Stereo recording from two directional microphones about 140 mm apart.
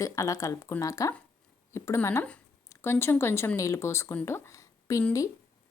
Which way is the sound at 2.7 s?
15° left (ahead or behind).